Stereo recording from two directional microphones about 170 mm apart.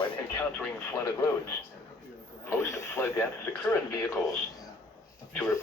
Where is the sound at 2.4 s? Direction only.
15° left (ahead or behind).